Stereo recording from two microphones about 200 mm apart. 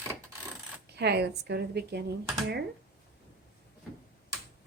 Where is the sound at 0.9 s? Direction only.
55° right (ahead or behind).